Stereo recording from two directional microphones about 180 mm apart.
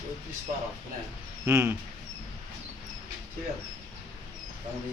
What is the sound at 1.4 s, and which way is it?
Speech, 15° right (ahead or behind).